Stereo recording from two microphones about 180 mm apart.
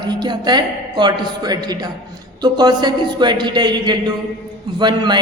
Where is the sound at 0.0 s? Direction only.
25° right (ahead or behind).